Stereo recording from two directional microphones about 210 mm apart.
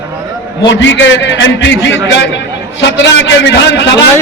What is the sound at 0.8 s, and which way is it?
A man's voice, 60° left (ahead or behind).